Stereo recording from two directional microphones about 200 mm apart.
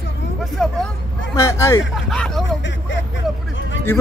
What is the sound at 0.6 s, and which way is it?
Vehicle, centre (ahead or behind).